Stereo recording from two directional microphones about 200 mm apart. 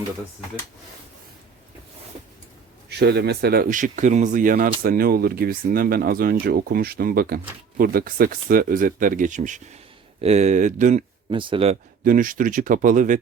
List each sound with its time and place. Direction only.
2.9 s speech: 55° right (ahead or behind); by 11.0 s 40° right (ahead or behind)
11.3 s speech: 25° right (ahead or behind)
12.0 s speech: 45° right (ahead or behind)